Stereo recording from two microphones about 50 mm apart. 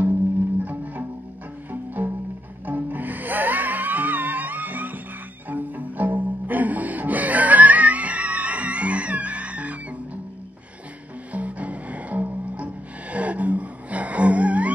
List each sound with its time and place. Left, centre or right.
1.7 s music: right
11.3 s music: right